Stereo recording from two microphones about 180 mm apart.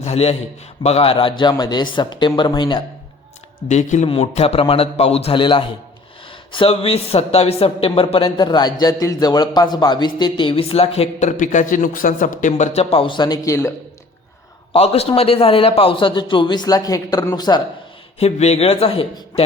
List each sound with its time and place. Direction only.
0.0 s a man's voice: 35° left (ahead or behind)
3.7 s speech: 40° left (ahead or behind); by 13.7 s 15° left (ahead or behind)
14.7 s a man's voice: 35° left (ahead or behind)
18.2 s speech: 35° left (ahead or behind)